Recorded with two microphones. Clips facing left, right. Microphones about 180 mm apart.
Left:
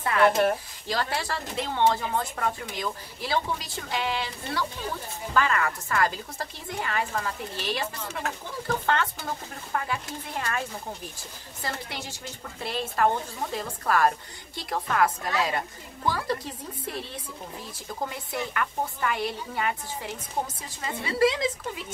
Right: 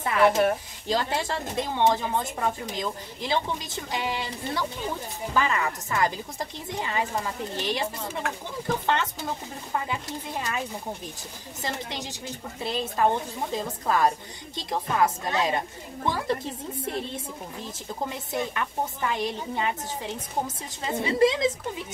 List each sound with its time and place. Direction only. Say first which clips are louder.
0.2 s speech: right 1 dB; centre (ahead or behind)
0.8 s a woman's voice: right 3 dB; 20° right (ahead or behind)